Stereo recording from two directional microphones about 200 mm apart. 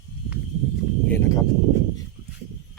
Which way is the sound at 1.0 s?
15° left (ahead or behind).